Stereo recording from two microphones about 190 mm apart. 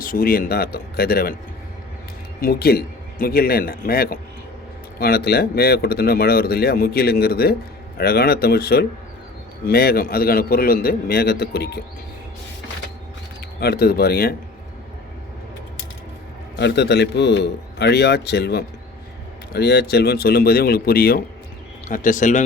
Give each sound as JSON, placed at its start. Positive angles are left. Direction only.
{"t": 0.0, "sound": "a man's voice", "side_deg": 50}
{"t": 2.4, "sound": "a man's voice", "side_deg": 55}
{"t": 13.6, "sound": "speech", "side_deg": 55}
{"t": 16.6, "sound": "a man's voice", "side_deg": 65}